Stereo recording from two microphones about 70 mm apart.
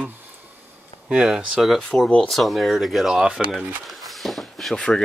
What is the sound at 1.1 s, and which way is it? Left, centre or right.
Speech, centre.